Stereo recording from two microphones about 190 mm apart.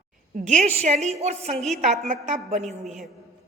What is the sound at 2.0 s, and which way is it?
Speech, 40° right (ahead or behind).